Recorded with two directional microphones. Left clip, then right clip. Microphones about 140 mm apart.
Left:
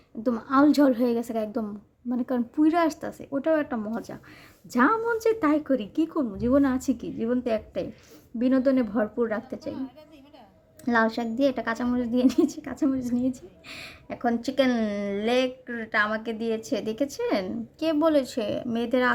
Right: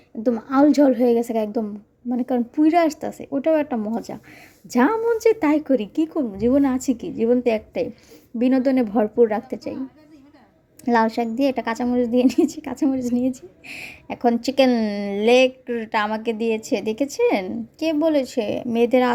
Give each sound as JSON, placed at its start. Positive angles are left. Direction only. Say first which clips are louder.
{"t": 0.2, "sound": "a woman's voice", "louder": "right 4 dB", "side_deg": -20}
{"t": 10.8, "sound": "a woman's voice", "louder": "right 5 dB", "side_deg": -25}
{"t": 14.8, "sound": "a woman's voice", "louder": "right 4 dB", "side_deg": -15}
{"t": 15.1, "sound": "a woman's voice", "louder": "right 10 dB", "side_deg": -30}